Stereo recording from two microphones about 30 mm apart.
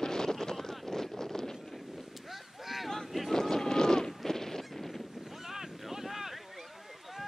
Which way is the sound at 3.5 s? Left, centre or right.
Left.